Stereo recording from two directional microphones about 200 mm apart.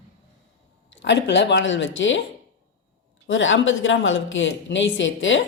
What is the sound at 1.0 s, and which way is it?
Speech, 65° left (ahead or behind).